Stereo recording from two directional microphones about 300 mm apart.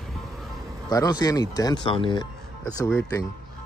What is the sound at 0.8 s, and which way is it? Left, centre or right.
Speech, centre.